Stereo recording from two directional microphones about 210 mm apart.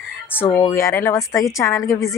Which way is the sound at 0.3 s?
10° left (ahead or behind).